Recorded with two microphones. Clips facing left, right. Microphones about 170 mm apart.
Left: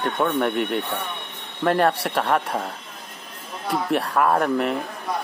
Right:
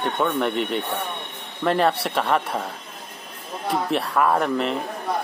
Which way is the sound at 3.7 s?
Centre (ahead or behind).